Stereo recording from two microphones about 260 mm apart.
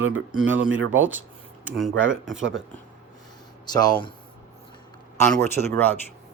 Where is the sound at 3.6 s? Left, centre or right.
Centre.